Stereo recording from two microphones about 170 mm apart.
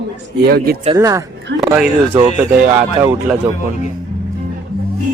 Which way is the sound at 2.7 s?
15° right (ahead or behind).